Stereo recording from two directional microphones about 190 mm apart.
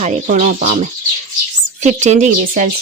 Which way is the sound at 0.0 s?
40° right (ahead or behind).